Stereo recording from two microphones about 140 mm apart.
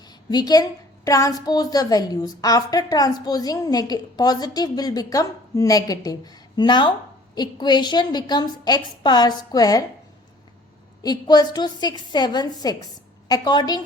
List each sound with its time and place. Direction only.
0.0 s a woman's voice: 30° left (ahead or behind)
11.0 s a woman's voice: 30° left (ahead or behind)